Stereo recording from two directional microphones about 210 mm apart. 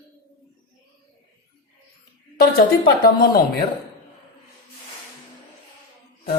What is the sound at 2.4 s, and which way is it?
A woman's voice, 50° left (ahead or behind).